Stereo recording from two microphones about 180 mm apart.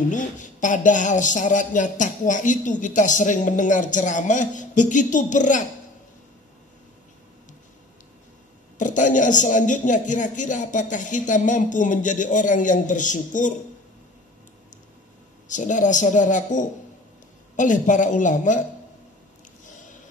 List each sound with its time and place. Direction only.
0.1 s a man's voice: 45° left (ahead or behind)
8.7 s a man's voice: 45° left (ahead or behind)
15.4 s a man's voice: 45° left (ahead or behind)